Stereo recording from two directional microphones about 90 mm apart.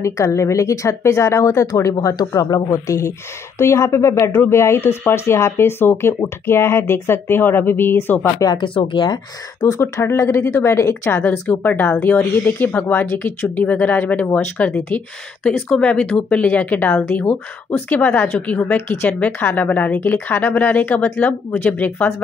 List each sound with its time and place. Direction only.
0.0 s a woman's voice: 35° left (ahead or behind)
8.5 s speech: 70° left (ahead or behind)
9.8 s speech: 30° left (ahead or behind)